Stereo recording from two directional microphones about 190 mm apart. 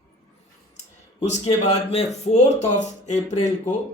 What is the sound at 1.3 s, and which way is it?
Speech, 35° left (ahead or behind).